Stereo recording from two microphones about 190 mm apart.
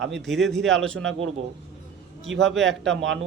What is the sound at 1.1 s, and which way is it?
Speech, 90° right.